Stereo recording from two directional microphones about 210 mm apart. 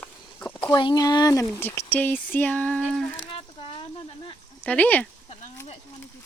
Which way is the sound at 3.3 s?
25° left (ahead or behind).